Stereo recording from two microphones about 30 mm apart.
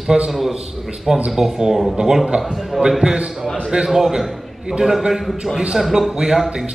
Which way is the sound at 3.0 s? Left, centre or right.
Right.